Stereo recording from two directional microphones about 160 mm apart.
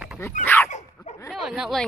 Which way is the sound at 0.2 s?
15° left (ahead or behind).